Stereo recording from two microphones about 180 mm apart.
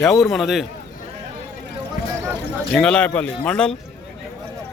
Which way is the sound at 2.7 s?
5° left (ahead or behind).